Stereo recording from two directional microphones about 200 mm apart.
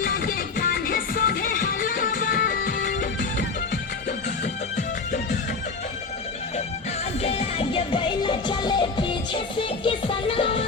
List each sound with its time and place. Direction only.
0.0 s music: 45° left (ahead or behind)
7.2 s music: 30° left (ahead or behind)